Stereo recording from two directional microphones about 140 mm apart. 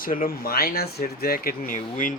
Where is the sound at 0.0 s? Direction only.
85° left.